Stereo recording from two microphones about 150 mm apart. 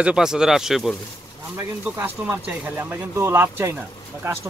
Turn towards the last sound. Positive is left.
turn(degrees=-15)  # may be behind; listen again after turning